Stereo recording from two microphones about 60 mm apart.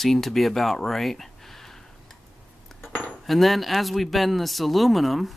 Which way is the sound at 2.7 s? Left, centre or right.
Left.